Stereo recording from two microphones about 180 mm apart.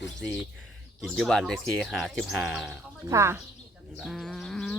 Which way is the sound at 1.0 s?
Centre (ahead or behind).